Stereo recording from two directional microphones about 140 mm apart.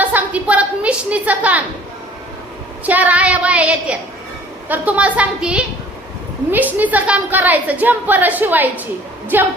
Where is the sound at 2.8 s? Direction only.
10° right (ahead or behind).